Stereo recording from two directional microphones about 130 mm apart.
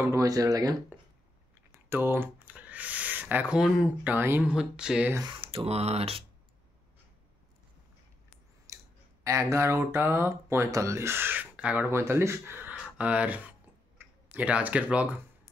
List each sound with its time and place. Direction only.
0.0 s speech: 25° right (ahead or behind)
1.9 s speech: 15° right (ahead or behind)
4.5 s speech: 5° right (ahead or behind)
5.2 s speech: 40° right (ahead or behind)
8.7 s clicking: 25° right (ahead or behind)
9.2 s speech: 25° right (ahead or behind)